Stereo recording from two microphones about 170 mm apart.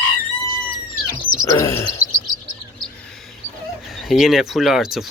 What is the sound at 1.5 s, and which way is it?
Chirp, 15° left (ahead or behind).